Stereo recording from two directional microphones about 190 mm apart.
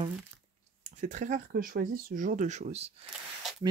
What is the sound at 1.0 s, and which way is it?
Speech, 40° right (ahead or behind).